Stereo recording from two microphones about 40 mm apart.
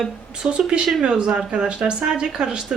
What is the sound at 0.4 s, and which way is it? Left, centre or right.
Speech, right.